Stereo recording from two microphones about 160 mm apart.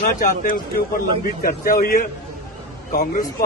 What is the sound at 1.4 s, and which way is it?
A man's voice, 65° left (ahead or behind).